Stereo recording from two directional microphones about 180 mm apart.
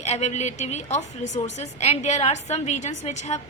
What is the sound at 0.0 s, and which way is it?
A woman's voice, 40° left (ahead or behind).